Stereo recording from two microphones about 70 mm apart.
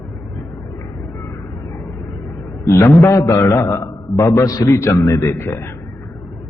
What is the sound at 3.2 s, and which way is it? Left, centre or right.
A man's voice, left.